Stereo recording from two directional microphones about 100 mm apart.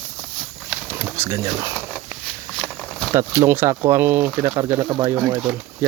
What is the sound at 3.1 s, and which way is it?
Speech, 30° right (ahead or behind).